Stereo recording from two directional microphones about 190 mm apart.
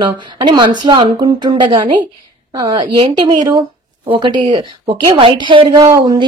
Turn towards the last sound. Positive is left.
turn(degrees=-20)  # may be behind; listen again after turning